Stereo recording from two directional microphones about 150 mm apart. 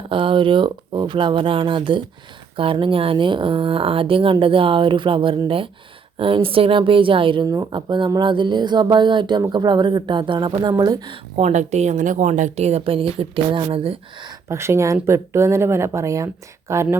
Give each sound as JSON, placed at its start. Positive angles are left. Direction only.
{"t": 0.1, "sound": "speech", "side_deg": -35}
{"t": 11.3, "sound": "speech", "side_deg": -50}
{"t": 14.5, "sound": "speech", "side_deg": -20}